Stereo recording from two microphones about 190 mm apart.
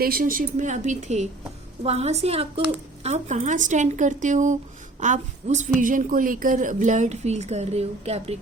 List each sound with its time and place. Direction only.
0.0 s a woman's voice: 50° right (ahead or behind); by 8.4 s 35° right (ahead or behind)